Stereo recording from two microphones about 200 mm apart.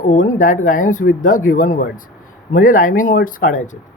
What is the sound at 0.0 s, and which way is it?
Speech, 40° left (ahead or behind).